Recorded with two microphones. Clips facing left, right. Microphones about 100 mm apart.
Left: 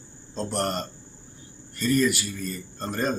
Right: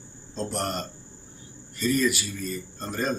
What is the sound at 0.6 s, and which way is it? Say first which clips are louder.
A man's voice: left 3 dB; 10° right (ahead or behind).